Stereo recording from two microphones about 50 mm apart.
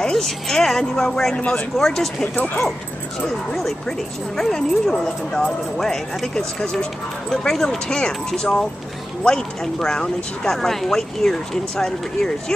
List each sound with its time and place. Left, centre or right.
0.0 s speech: centre
1.3 s speech: left
1.8 s speech: centre
3.5 s speech: centre